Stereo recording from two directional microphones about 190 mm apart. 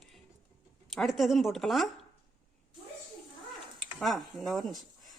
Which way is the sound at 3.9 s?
Centre (ahead or behind).